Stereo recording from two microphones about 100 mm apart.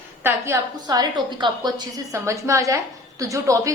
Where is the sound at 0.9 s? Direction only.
40° right (ahead or behind).